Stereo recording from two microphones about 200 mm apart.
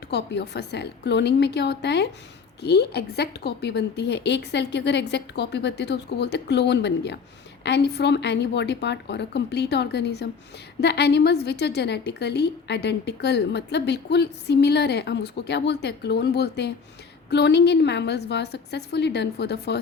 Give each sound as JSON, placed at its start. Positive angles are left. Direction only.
{"t": 0.1, "sound": "a woman's voice", "side_deg": 55}